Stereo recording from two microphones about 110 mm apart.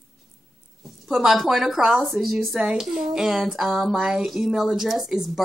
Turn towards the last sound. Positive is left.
turn(degrees=0)  # may be behind; listen again after turning